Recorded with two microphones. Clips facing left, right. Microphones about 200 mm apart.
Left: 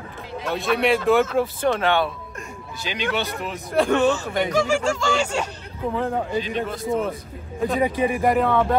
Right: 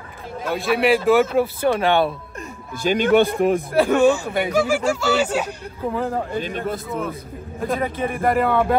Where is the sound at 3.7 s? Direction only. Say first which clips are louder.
Right 1 dB; 5° right (ahead or behind).